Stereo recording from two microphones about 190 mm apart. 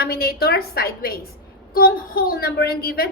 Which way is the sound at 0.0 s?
55° left (ahead or behind).